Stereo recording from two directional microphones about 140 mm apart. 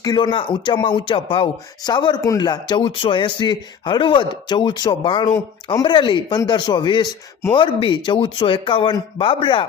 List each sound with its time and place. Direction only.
0.0 s speech: 30° left (ahead or behind)